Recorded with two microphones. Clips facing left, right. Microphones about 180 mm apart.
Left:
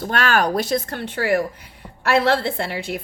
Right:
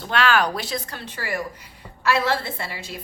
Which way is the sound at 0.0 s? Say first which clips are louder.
Left 1 dB; 45° left (ahead or behind).